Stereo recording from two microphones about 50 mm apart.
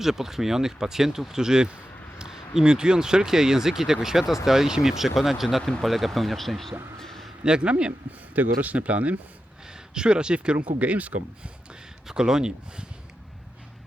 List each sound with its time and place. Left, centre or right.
0.0 s speech: centre
7.0 s a sound: centre
7.4 s speech: centre
9.6 s speech: centre; by 11.5 s right
11.7 s speech: centre